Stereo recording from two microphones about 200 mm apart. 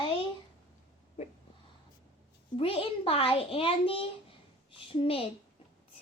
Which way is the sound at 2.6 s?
30° left (ahead or behind).